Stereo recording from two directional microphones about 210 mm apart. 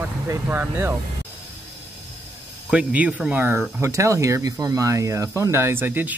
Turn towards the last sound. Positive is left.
turn(degrees=-10)  # may be behind; listen again after turning